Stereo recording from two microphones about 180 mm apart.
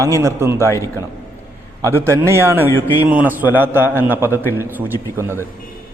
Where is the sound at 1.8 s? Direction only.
15° right (ahead or behind).